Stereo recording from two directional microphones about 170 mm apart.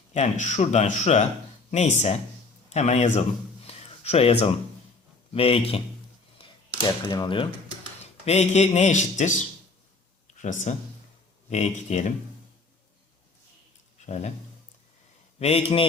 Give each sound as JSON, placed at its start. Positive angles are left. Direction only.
{"t": 0.1, "sound": "speech", "side_deg": 45}
{"t": 3.7, "sound": "a sound", "side_deg": 40}
{"t": 5.3, "sound": "speech", "side_deg": 35}
{"t": 6.4, "sound": "a sound", "side_deg": 25}
{"t": 8.2, "sound": "speech", "side_deg": 40}
{"t": 14.0, "sound": "speech", "side_deg": 40}
{"t": 15.4, "sound": "speech", "side_deg": 35}